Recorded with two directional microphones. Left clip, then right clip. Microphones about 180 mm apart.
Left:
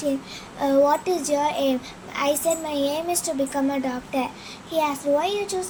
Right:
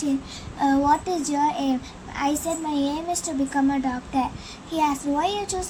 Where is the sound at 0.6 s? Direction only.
15° left (ahead or behind).